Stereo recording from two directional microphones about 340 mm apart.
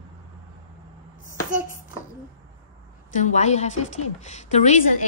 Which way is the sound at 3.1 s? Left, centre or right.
Left.